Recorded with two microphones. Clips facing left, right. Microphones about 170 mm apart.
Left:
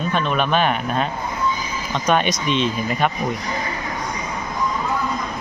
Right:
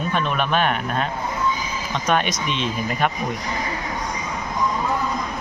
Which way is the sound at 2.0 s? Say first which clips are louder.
Left 3 dB; centre (ahead or behind).